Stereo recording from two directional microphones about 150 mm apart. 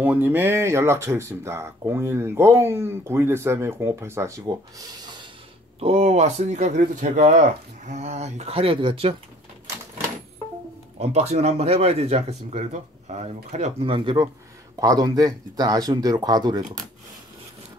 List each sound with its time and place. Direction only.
0.0 s speech: 10° right (ahead or behind)
5.8 s speech: 45° right (ahead or behind)
11.0 s speech: 45° right (ahead or behind); by 16.8 s 25° right (ahead or behind)